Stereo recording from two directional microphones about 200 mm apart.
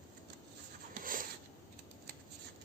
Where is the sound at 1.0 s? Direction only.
45° right (ahead or behind).